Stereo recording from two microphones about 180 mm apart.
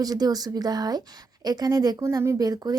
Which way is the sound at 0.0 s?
20° right (ahead or behind).